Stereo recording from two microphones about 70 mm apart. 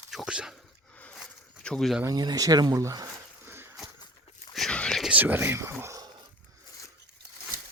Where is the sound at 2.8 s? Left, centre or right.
Right.